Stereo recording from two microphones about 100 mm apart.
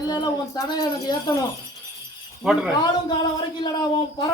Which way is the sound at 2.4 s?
10° right (ahead or behind).